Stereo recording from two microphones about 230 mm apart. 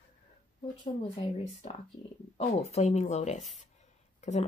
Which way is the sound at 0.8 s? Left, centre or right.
Left.